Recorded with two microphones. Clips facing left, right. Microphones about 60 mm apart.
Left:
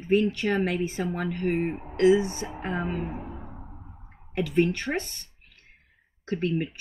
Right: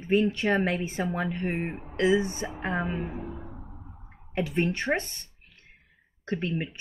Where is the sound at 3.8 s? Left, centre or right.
Centre.